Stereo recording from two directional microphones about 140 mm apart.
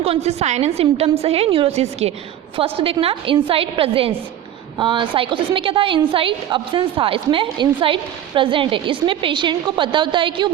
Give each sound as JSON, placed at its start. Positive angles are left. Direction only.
{"t": 0.0, "sound": "a woman's voice", "side_deg": -45}